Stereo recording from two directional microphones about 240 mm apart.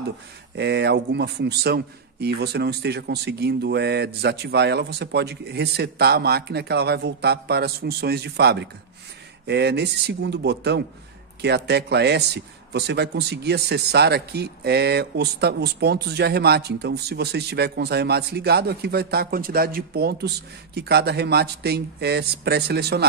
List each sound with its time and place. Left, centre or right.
0.6 s speech: right